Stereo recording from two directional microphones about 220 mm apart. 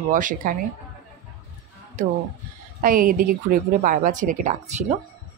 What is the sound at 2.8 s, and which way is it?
Speech, 40° right (ahead or behind).